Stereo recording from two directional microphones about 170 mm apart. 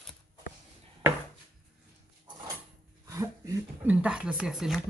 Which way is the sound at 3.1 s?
20° right (ahead or behind).